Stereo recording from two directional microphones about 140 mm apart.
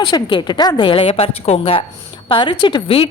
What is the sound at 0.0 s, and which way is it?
A woman's voice, 35° left (ahead or behind).